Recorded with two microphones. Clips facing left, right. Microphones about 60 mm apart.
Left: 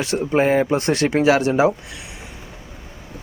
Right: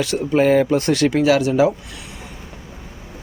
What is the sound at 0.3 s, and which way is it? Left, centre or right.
Speech, left.